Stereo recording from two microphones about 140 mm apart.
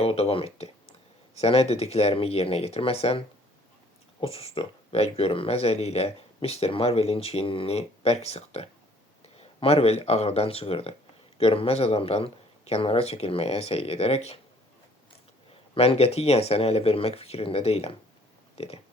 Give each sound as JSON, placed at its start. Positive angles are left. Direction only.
{"t": 0.0, "sound": "speech", "side_deg": 45}
{"t": 15.7, "sound": "speech", "side_deg": 40}
{"t": 18.5, "sound": "a sound", "side_deg": 45}